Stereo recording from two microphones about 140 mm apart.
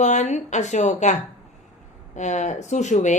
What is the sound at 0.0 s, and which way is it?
Speech, 60° left (ahead or behind).